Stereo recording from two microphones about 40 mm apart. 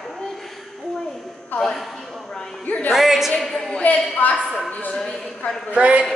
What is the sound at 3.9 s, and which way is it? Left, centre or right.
Speech, left.